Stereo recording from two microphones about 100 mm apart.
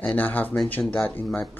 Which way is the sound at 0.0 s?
15° left (ahead or behind).